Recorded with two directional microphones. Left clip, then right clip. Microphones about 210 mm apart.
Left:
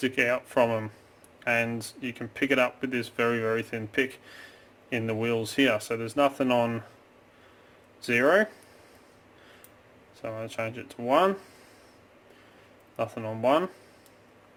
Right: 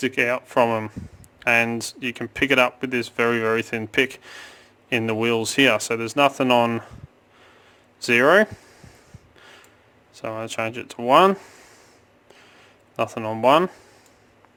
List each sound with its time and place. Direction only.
0.0 s speech: 25° right (ahead or behind)
8.0 s speech: 30° right (ahead or behind)
10.2 s speech: 35° right (ahead or behind)
13.0 s speech: 35° right (ahead or behind)